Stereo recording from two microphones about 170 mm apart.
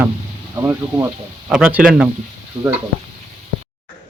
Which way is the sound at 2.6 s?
20° right (ahead or behind).